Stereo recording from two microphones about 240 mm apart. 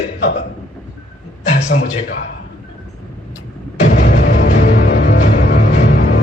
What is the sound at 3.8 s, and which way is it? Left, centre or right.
Music, left.